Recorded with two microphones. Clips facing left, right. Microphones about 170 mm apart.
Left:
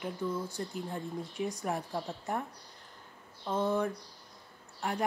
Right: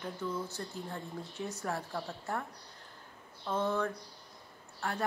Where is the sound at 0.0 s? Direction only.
15° left (ahead or behind).